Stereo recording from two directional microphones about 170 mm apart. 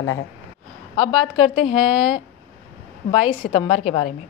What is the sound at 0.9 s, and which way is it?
A woman's voice, 30° left (ahead or behind).